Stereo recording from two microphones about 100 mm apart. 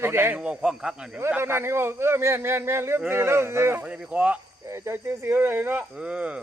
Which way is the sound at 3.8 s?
15° right (ahead or behind).